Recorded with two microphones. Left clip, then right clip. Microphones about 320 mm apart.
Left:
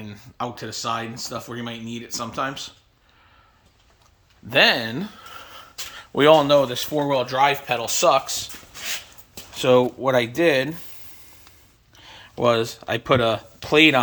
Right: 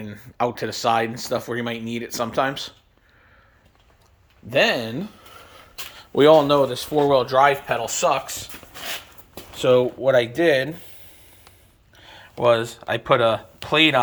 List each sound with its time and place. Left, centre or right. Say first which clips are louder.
0.0 s speech: right 6 dB; centre
4.4 s speech: left 2 dB; centre
4.9 s a sound: left 1 dB; centre
6.0 s speech: right 1 dB; centre
9.6 s speech: even; centre
11.9 s speech: even; centre